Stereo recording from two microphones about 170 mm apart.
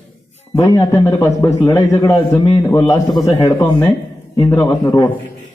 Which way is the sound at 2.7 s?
15° left (ahead or behind).